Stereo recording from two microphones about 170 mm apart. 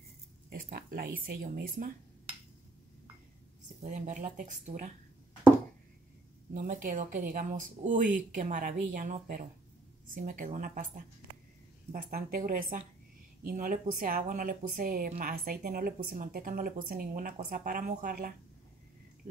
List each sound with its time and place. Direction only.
0.5 s a sound: 60° right (ahead or behind)
1.2 s speech: 55° right (ahead or behind)
3.6 s speech: 45° right (ahead or behind)
6.5 s speech: 50° right (ahead or behind)
11.9 s speech: 55° right (ahead or behind)